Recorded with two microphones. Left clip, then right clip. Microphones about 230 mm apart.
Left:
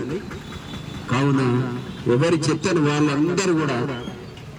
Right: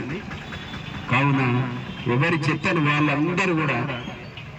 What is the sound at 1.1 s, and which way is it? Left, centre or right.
A man's voice, centre.